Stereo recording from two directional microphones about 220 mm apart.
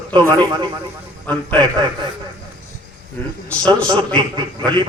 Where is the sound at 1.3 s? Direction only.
10° left (ahead or behind).